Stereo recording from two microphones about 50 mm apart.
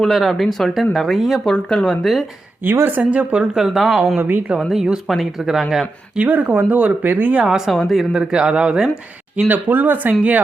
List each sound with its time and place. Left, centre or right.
0.1 s speech: centre
1.7 s speech: centre
2.6 s speech: right
3.0 s speech: right
3.5 s speech: centre
4.2 s speech: right
4.7 s speech: centre
6.1 s speech: right
7.4 s speech: centre
7.8 s speech: centre
8.3 s speech: centre
9.5 s speech: right